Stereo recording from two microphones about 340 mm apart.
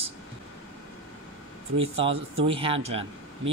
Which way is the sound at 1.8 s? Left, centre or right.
Centre.